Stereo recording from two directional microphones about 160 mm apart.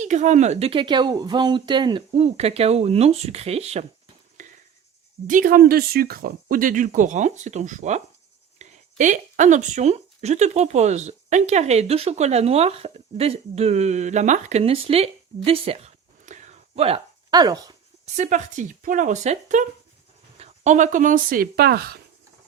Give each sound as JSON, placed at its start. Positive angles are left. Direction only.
{"t": 0.0, "sound": "speech", "side_deg": -50}
{"t": 2.1, "sound": "speech", "side_deg": -40}
{"t": 4.4, "sound": "a sound", "side_deg": -50}
{"t": 5.3, "sound": "speech", "side_deg": -60}
{"t": 15.4, "sound": "a sound", "side_deg": -35}
{"t": 17.3, "sound": "speech", "side_deg": -25}
{"t": 18.0, "sound": "speech", "side_deg": -50}